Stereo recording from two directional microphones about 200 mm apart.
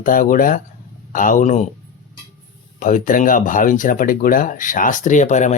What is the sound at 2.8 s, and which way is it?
Speech, 40° left (ahead or behind).